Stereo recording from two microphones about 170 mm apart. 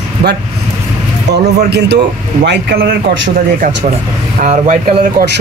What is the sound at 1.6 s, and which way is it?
Speech, 75° right (ahead or behind).